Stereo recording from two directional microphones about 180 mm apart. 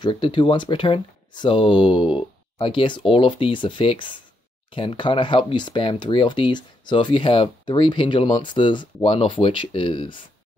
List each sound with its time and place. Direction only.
0.0 s speech: 25° left (ahead or behind)